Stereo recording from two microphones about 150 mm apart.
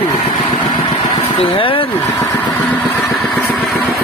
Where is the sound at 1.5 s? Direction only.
35° left (ahead or behind).